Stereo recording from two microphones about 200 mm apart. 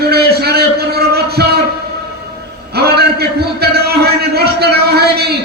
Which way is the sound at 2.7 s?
55° right (ahead or behind).